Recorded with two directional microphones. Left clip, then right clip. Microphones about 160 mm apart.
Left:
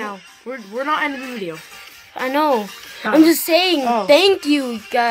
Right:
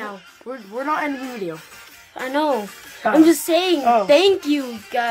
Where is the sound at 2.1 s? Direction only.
20° left (ahead or behind).